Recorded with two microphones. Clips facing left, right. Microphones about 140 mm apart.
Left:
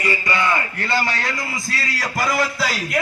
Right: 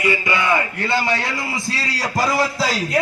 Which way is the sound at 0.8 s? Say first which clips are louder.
Right 2 dB; 20° right (ahead or behind).